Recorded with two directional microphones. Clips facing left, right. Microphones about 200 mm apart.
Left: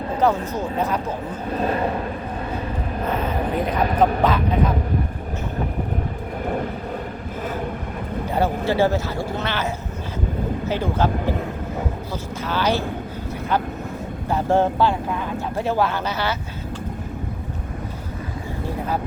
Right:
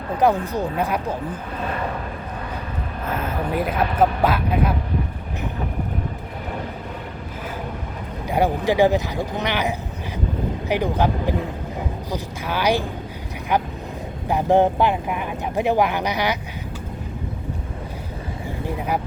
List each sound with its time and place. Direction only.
0.2 s speech: 15° right (ahead or behind)
1.6 s a sound: 30° left (ahead or behind)
3.5 s speech: 5° right (ahead or behind)
8.3 s speech: 15° right (ahead or behind)
14.3 s speech: 15° right (ahead or behind)